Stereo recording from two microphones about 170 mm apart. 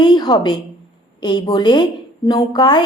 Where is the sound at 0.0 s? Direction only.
25° left (ahead or behind).